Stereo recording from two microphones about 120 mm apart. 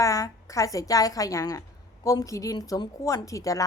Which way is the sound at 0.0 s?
25° left (ahead or behind).